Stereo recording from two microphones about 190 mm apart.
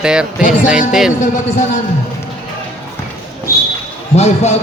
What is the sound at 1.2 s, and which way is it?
Speech, 45° left (ahead or behind).